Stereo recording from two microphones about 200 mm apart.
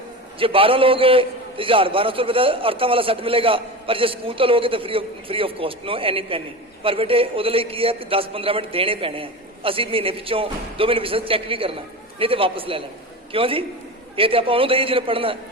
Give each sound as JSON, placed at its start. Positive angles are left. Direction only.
{"t": 0.3, "sound": "a man's voice", "side_deg": -25}